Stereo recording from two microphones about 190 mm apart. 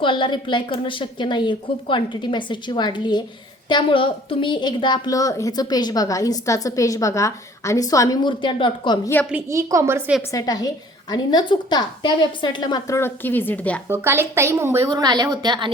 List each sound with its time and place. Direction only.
0.0 s a woman's voice: 25° left (ahead or behind)
9.3 s a woman's voice: 15° right (ahead or behind)
10.3 s a woman's voice: 20° left (ahead or behind)
13.8 s a woman's voice: 10° right (ahead or behind)